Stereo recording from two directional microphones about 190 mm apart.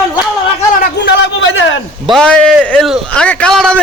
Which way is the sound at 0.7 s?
60° left (ahead or behind).